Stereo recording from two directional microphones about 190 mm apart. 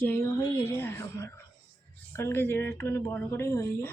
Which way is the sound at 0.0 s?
10° left (ahead or behind).